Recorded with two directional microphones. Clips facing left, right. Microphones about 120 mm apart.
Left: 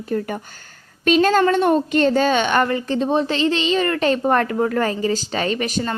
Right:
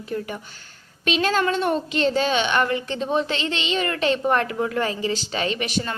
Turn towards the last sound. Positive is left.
turn(degrees=40)  # may be behind; listen again after turning